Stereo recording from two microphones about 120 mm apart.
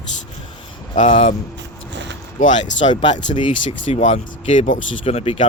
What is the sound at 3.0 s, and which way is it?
Speech, 40° left (ahead or behind).